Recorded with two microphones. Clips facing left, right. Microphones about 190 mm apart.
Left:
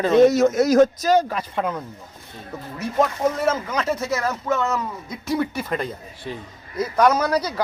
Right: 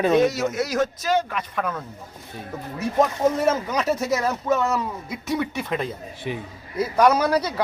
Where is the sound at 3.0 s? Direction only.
15° right (ahead or behind); by 5.9 s centre (ahead or behind).